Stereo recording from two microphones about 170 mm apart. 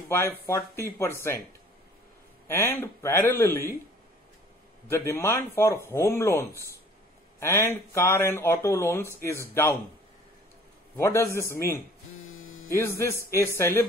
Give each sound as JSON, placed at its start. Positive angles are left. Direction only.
{"t": 0.1, "sound": "speech", "side_deg": 15}
{"t": 2.4, "sound": "speech", "side_deg": 15}
{"t": 4.8, "sound": "speech", "side_deg": 15}
{"t": 11.0, "sound": "speech", "side_deg": 15}
{"t": 12.7, "sound": "speech", "side_deg": 15}